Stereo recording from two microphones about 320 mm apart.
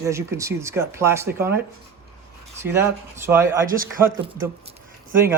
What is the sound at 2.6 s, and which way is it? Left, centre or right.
Speech, centre.